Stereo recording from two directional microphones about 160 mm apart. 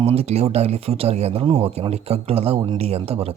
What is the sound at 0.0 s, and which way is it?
Speech, 40° right (ahead or behind).